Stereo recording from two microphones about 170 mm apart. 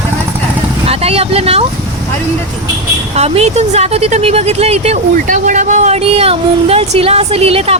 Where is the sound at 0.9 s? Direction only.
35° right (ahead or behind).